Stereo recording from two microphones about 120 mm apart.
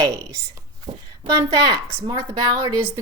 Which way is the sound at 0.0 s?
30° right (ahead or behind).